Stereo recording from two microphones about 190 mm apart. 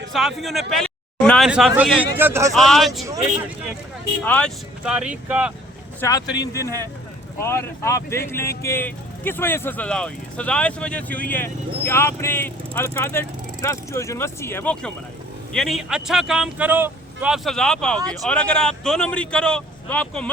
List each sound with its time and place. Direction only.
0.1 s speech: centre (ahead or behind)
2.5 s speech: centre (ahead or behind)
4.2 s speech: 5° left (ahead or behind)
4.9 s speech: 5° right (ahead or behind)
6.0 s speech: 20° left (ahead or behind)